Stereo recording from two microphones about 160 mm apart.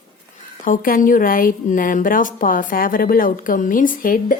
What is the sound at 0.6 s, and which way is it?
A woman's voice, 60° left (ahead or behind).